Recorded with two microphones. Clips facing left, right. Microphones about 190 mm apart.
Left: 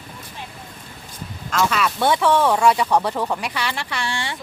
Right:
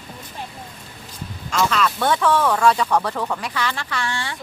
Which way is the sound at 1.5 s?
5° left (ahead or behind).